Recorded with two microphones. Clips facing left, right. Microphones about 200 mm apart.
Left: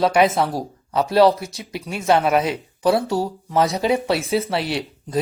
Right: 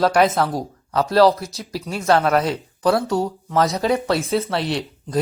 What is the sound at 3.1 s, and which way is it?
Speech, 5° left (ahead or behind).